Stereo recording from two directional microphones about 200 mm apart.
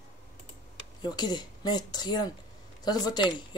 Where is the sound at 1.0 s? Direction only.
20° left (ahead or behind).